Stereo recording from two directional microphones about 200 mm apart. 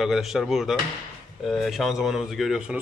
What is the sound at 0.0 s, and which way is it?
Speech, centre (ahead or behind).